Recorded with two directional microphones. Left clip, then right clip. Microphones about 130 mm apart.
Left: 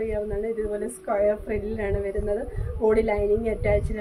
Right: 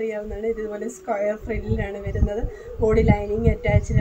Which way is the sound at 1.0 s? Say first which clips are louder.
Left 1 dB; 25° left (ahead or behind).